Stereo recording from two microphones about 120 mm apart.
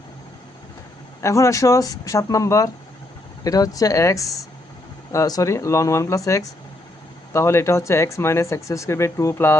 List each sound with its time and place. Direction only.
1.2 s speech: 25° left (ahead or behind)